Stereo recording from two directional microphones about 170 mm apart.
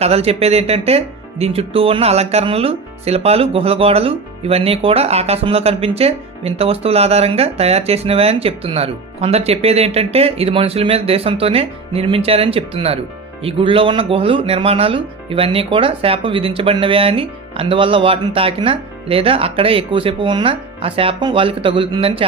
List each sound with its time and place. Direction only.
0.0 s speech: 35° right (ahead or behind)